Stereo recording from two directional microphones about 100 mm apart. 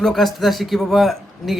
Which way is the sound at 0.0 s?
Centre (ahead or behind).